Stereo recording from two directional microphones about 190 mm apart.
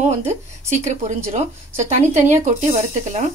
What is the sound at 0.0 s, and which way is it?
A woman's voice, 35° right (ahead or behind).